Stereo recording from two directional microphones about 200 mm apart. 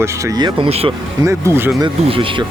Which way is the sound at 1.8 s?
25° right (ahead or behind).